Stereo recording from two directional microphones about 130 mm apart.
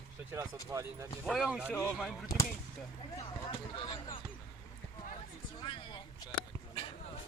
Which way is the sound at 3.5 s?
45° left (ahead or behind).